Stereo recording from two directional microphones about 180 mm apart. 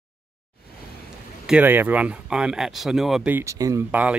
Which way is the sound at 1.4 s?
10° right (ahead or behind).